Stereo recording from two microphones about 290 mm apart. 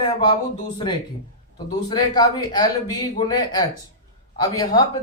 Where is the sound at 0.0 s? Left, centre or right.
Centre.